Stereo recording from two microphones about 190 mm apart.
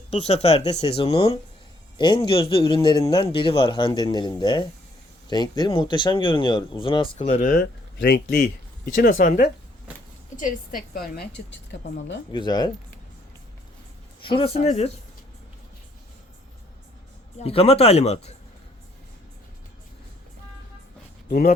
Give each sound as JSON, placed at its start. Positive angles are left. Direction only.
{"t": 0.1, "sound": "speech", "side_deg": 35}
{"t": 7.9, "sound": "speech", "side_deg": 60}
{"t": 9.0, "sound": "a woman's voice", "side_deg": 45}
{"t": 11.3, "sound": "speech", "side_deg": 70}
{"t": 12.3, "sound": "speech", "side_deg": 20}
{"t": 14.3, "sound": "speech", "side_deg": 30}
{"t": 17.4, "sound": "speech", "side_deg": 30}